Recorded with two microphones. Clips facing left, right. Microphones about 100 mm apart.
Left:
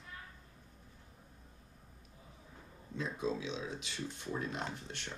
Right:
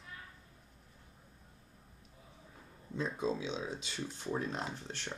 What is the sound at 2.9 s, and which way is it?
Speech, 30° right (ahead or behind).